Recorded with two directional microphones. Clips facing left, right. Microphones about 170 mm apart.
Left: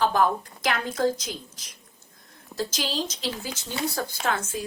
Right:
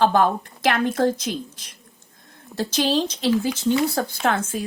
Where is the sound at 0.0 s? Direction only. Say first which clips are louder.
Right 4 dB; 65° right (ahead or behind).